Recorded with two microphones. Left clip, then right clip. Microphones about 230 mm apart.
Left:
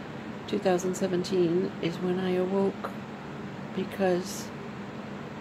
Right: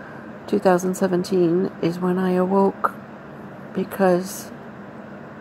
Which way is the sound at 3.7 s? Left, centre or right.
Right.